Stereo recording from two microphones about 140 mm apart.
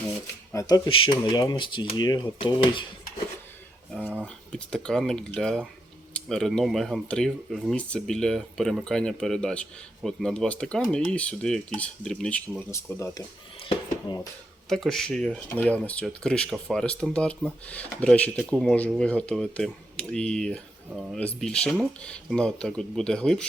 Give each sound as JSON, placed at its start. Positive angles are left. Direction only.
{"t": 0.9, "sound": "speech", "side_deg": 40}
{"t": 4.0, "sound": "speech", "side_deg": -10}
{"t": 4.5, "sound": "speech", "side_deg": 5}
{"t": 12.7, "sound": "speech", "side_deg": 20}
{"t": 14.1, "sound": "speech", "side_deg": 35}
{"t": 14.7, "sound": "speech", "side_deg": 0}